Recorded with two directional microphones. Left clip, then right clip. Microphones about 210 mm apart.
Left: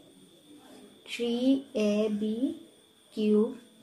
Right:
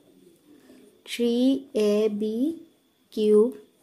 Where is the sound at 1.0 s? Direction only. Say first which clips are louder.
Right 5 dB; 45° right (ahead or behind).